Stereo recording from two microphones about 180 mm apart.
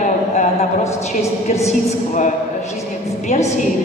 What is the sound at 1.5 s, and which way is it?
Speech, 35° left (ahead or behind).